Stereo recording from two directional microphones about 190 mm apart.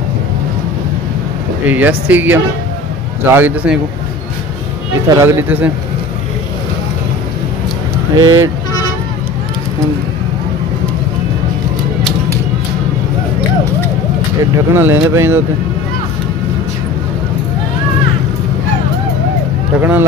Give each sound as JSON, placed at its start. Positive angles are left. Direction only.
{"t": 1.7, "sound": "speech", "side_deg": -10}
{"t": 5.0, "sound": "speech", "side_deg": -15}
{"t": 8.1, "sound": "speech", "side_deg": -20}
{"t": 14.7, "sound": "speech", "side_deg": -10}
{"t": 19.8, "sound": "speech", "side_deg": -10}